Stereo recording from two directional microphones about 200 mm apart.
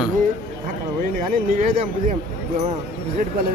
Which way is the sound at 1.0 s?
40° right (ahead or behind).